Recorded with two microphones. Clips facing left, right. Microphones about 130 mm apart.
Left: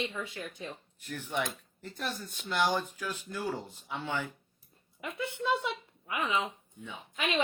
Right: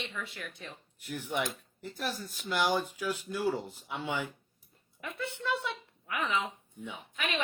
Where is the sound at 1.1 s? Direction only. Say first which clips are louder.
Right 1 dB; 10° right (ahead or behind).